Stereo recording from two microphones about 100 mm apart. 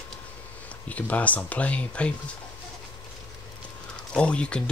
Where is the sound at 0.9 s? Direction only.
15° left (ahead or behind).